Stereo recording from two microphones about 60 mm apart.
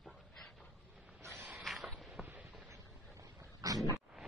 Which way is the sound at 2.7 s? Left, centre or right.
Right.